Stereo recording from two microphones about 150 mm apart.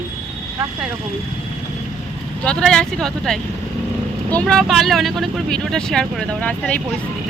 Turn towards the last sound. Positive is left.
turn(degrees=10)  # may be behind; listen again after turning